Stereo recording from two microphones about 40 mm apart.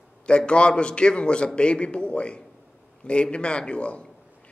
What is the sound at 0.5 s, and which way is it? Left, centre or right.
A man's voice, left.